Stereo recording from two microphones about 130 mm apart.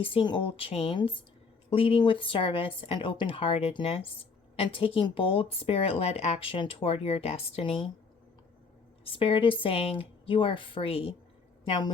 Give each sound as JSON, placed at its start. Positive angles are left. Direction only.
{"t": 0.0, "sound": "speech", "side_deg": 40}
{"t": 9.0, "sound": "a woman's voice", "side_deg": 45}